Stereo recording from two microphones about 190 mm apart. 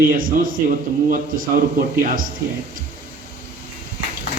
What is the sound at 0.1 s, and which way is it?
A man's voice, 45° right (ahead or behind).